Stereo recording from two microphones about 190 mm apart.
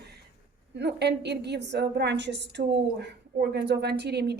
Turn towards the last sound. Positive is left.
turn(degrees=-60)  # may be behind; listen again after turning